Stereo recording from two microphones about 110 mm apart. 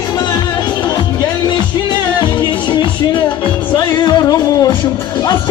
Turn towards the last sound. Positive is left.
turn(degrees=35)  # may be behind; listen again after turning